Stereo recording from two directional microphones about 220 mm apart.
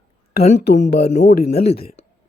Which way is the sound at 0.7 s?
40° left (ahead or behind).